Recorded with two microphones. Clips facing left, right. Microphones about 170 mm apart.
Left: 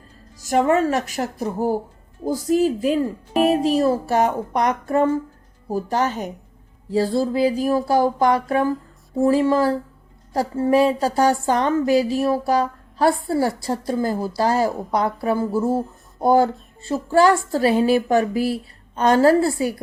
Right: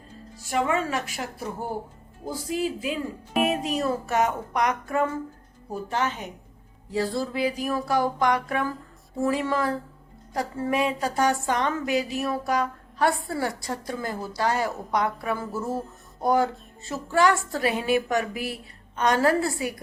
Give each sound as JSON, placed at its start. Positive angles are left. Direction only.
{"t": 0.3, "sound": "speech", "side_deg": 40}
{"t": 6.9, "sound": "speech", "side_deg": 30}